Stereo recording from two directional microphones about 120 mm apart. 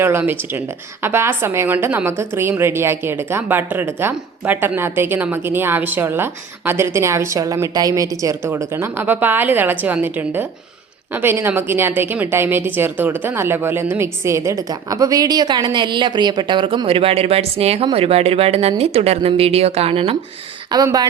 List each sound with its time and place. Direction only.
0.0 s a woman's voice: 20° right (ahead or behind); by 20.1 s 55° right (ahead or behind)
20.8 s speech: 30° right (ahead or behind)